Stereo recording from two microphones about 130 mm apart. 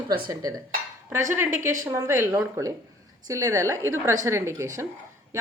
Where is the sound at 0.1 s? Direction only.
25° right (ahead or behind).